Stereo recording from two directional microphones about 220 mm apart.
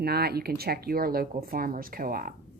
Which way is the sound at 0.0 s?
45° right (ahead or behind).